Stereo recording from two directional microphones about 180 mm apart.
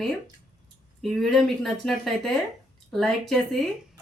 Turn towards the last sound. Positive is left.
turn(degrees=0)  # may be behind; listen again after turning